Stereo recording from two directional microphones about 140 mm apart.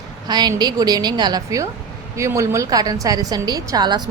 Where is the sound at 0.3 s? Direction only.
30° right (ahead or behind).